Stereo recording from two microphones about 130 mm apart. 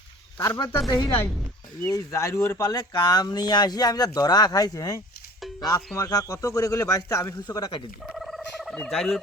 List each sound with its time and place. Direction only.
0.3 s a man's voice: 30° left (ahead or behind)
8.1 s a sound: centre (ahead or behind)
8.9 s fowl: centre (ahead or behind)